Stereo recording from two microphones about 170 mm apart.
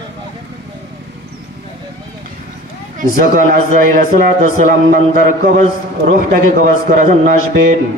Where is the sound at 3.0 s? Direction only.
55° right (ahead or behind).